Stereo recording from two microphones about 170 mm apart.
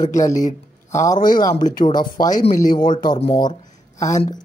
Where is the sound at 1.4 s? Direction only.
25° left (ahead or behind).